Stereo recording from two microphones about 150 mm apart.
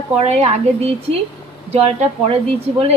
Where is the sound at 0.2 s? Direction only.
45° right (ahead or behind).